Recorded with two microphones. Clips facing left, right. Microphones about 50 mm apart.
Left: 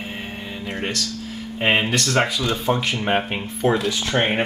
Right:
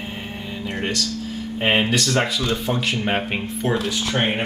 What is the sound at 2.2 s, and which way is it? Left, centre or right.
Speech, left.